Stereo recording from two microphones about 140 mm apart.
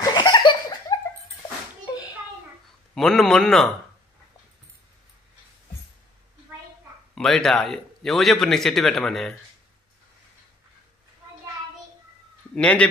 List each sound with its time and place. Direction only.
0.0 s laughter: 30° left (ahead or behind)
2.9 s speech: 5° left (ahead or behind)
7.2 s speech: 5° left (ahead or behind)
12.5 s speech: 10° left (ahead or behind)